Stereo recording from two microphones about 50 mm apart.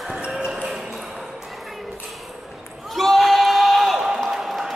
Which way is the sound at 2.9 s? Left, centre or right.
Centre.